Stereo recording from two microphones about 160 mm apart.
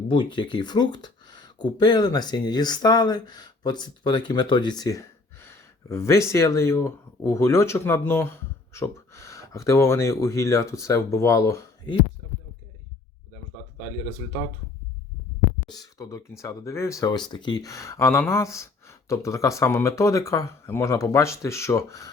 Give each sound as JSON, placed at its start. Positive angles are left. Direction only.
{"t": 0.1, "sound": "speech", "side_deg": 30}
{"t": 15.7, "sound": "speech", "side_deg": 20}